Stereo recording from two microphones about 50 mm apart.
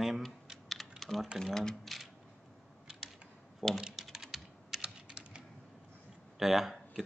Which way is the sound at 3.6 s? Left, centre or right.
Centre.